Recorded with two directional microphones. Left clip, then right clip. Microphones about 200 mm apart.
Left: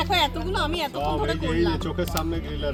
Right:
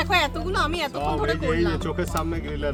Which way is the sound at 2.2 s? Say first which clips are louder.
Right 1 dB; 30° left (ahead or behind).